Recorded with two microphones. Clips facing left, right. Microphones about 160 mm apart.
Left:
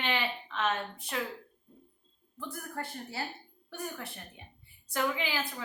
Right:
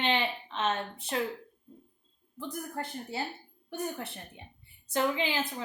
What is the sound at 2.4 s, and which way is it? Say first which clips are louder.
A woman's voice: right 3 dB; 20° right (ahead or behind).